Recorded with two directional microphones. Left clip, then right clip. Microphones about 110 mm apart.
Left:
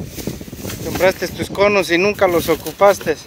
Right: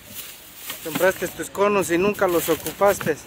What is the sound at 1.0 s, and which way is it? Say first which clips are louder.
Speech: left 5 dB; 10° left (ahead or behind).